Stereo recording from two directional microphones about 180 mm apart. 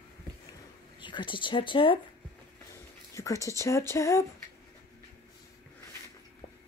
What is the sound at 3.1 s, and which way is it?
Speech, 20° left (ahead or behind).